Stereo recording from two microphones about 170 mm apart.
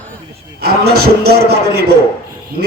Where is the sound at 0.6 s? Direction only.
65° right (ahead or behind).